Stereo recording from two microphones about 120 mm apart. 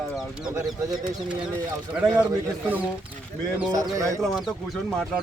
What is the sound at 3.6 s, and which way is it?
Speech, 30° right (ahead or behind).